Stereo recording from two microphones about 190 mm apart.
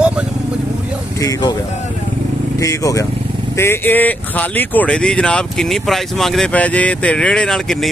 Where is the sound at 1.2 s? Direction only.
20° left (ahead or behind).